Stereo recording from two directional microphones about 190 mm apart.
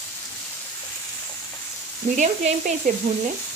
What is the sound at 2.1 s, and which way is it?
Speech, 40° right (ahead or behind).